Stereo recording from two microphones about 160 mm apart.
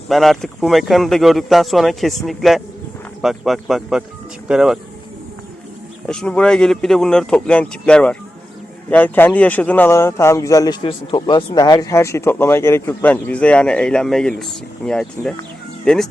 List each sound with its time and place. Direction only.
0.1 s speech: centre (ahead or behind)
6.1 s speech: 5° left (ahead or behind)